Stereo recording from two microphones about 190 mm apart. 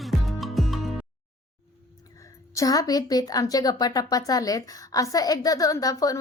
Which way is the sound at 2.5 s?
15° left (ahead or behind).